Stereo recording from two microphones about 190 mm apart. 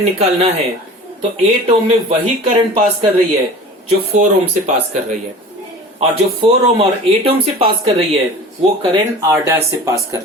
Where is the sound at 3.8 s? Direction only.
35° right (ahead or behind).